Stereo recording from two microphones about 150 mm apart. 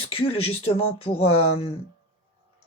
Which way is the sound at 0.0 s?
40° left (ahead or behind).